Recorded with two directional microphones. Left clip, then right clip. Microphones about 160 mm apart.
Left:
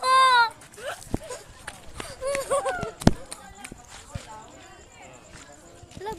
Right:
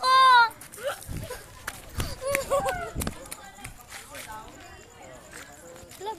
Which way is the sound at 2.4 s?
30° left (ahead or behind).